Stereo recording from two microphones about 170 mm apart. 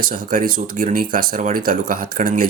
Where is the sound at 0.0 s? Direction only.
55° right (ahead or behind).